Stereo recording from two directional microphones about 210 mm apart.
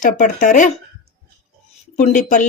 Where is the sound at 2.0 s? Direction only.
35° left (ahead or behind).